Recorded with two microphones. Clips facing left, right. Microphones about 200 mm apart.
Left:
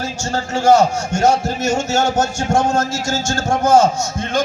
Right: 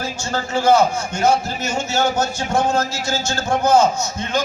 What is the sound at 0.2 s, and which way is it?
A man's voice, 45° left (ahead or behind).